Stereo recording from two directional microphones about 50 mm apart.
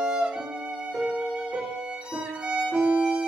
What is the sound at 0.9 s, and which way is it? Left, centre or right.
Music, right.